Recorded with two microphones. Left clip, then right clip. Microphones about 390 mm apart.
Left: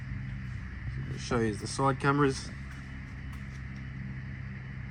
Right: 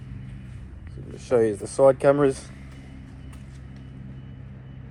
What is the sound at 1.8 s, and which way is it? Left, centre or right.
Speech, right.